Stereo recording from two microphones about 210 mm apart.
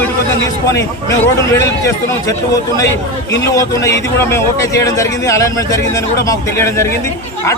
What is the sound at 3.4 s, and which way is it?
A man's voice, 15° left (ahead or behind).